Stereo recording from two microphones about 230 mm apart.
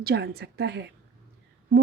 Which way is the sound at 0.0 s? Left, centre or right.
Right.